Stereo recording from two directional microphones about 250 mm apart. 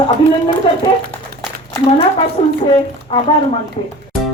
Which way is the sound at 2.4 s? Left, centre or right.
Left.